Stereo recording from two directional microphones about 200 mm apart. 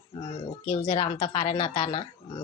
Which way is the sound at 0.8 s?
25° left (ahead or behind).